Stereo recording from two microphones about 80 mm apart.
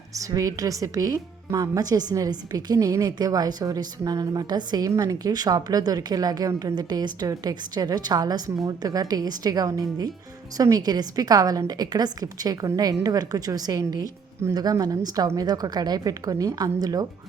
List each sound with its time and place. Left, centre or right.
0.1 s speech: right
4.9 s a woman's voice: right